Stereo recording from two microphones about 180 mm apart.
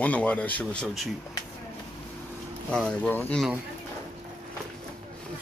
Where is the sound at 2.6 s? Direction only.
5° left (ahead or behind).